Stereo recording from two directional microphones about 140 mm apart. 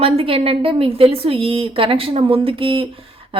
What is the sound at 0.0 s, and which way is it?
A woman's voice, 45° right (ahead or behind).